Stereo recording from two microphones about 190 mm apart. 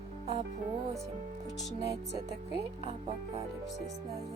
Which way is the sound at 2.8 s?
30° right (ahead or behind).